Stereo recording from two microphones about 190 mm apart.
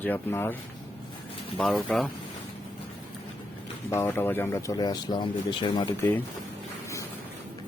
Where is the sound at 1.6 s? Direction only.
Centre (ahead or behind).